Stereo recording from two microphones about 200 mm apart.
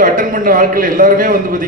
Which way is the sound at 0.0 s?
40° right (ahead or behind).